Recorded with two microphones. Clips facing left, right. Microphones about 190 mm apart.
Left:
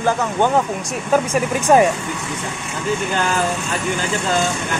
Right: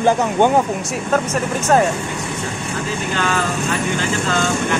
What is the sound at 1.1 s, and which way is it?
Speech, 10° left (ahead or behind).